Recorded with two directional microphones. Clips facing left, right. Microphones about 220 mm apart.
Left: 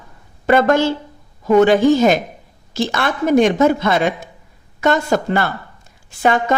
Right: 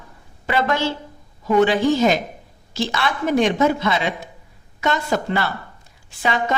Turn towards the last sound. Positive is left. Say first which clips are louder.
# left 6 dB
turn(degrees=50)  # may be behind; listen again after turning